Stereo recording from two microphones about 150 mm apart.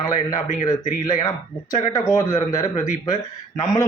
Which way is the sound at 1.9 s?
20° left (ahead or behind).